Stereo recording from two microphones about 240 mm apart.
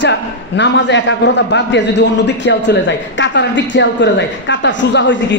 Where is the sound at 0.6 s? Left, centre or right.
Left.